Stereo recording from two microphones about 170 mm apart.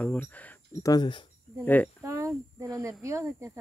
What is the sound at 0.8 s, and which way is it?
Speech, 25° left (ahead or behind).